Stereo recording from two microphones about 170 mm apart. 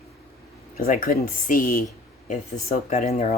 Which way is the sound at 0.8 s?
55° left (ahead or behind).